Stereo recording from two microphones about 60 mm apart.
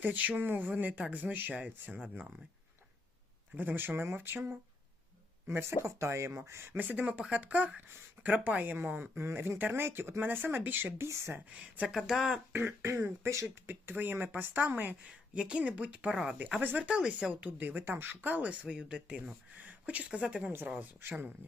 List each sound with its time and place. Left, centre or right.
0.0 s speech: right
3.5 s speech: right
6.8 s speech: right
11.0 s speech: right
11.5 s speech: right
11.9 s speech: centre
12.8 s speech: right
13.7 s speech: right
16.8 s speech: centre
17.4 s speech: right
20.5 s speech: right